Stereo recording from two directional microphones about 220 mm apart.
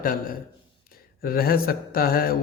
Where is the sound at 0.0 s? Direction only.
40° left (ahead or behind).